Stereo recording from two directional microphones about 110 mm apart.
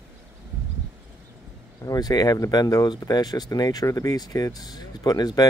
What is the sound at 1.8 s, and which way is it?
Speech, 35° left (ahead or behind).